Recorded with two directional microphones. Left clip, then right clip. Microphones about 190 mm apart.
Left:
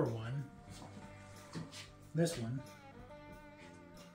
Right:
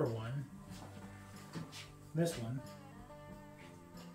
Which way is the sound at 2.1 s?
Centre (ahead or behind).